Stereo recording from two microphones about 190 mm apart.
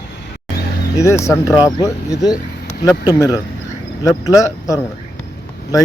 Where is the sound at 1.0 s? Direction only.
15° left (ahead or behind).